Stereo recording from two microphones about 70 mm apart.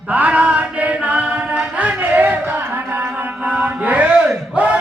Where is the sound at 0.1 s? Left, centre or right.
Centre.